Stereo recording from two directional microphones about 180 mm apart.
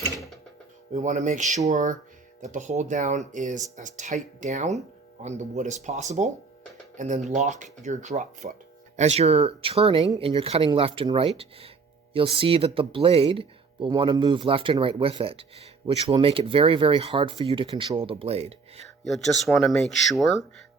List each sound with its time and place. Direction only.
0.1 s music: centre (ahead or behind)
0.9 s speech: 45° right (ahead or behind)
19.0 s speech: centre (ahead or behind)